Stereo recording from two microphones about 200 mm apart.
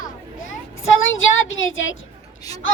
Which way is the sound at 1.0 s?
75° left (ahead or behind).